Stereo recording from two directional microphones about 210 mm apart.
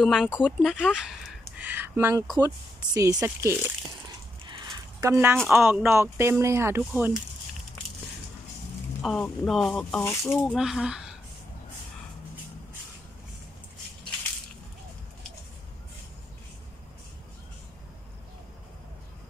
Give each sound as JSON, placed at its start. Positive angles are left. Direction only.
{"t": 0.0, "sound": "speech", "side_deg": 0}
{"t": 4.5, "sound": "a sound", "side_deg": -20}
{"t": 5.5, "sound": "speech", "side_deg": -10}
{"t": 9.0, "sound": "speech", "side_deg": 5}